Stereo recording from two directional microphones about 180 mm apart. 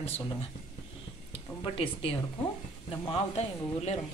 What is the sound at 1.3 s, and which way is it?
Speech, 30° left (ahead or behind).